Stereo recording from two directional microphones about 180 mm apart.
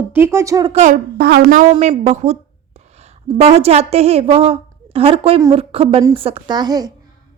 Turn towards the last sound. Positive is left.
turn(degrees=-20)  # may be behind; listen again after turning